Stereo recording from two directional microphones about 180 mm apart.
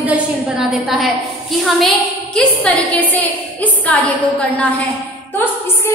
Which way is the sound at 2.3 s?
10° left (ahead or behind).